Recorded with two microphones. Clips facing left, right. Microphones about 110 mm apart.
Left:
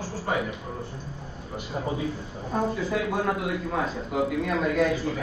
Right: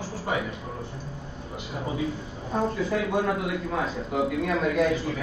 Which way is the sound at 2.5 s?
5° left (ahead or behind).